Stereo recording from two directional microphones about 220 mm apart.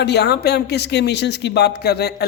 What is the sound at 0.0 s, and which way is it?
Speech, 50° left (ahead or behind).